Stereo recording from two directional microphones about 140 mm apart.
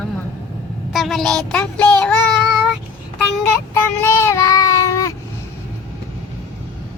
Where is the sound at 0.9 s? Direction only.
Centre (ahead or behind).